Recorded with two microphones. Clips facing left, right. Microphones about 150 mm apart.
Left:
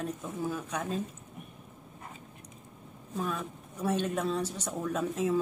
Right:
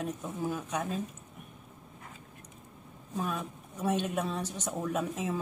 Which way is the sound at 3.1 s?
15° right (ahead or behind).